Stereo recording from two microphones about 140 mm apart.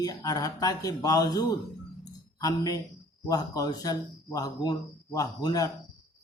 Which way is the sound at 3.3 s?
25° left (ahead or behind).